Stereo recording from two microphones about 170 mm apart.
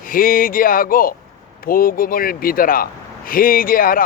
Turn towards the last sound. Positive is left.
turn(degrees=55)  # may be behind; listen again after turning